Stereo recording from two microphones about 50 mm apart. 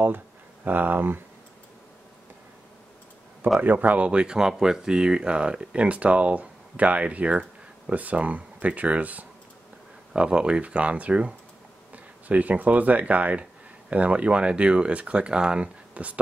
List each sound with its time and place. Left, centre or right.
0.7 s speech: right
3.6 s speech: right
10.1 s speech: centre